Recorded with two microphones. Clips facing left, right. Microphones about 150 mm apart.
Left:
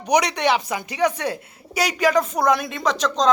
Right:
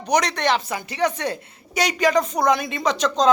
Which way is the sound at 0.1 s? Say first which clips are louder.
Left 1 dB; 10° left (ahead or behind).